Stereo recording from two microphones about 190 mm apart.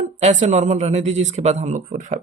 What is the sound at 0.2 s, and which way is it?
Speech, 40° right (ahead or behind).